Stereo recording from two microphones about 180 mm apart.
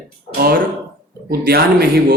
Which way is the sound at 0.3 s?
55° right (ahead or behind).